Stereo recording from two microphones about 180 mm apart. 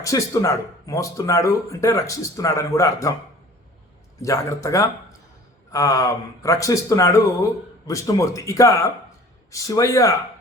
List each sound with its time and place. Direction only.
0.0 s speech: 15° left (ahead or behind)
4.2 s speech: 20° left (ahead or behind)